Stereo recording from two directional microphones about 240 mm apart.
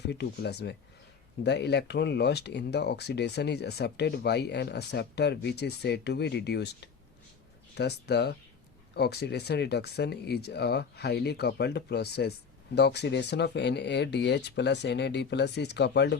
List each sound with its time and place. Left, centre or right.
0.1 s speech: left